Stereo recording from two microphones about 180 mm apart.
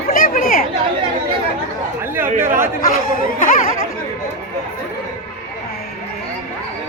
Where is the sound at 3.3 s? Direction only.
45° left (ahead or behind).